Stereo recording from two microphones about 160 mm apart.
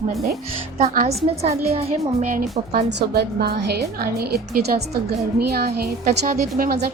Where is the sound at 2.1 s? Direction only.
60° right (ahead or behind).